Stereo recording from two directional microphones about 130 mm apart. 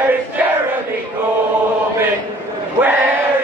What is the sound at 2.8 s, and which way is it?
Chant, 15° right (ahead or behind).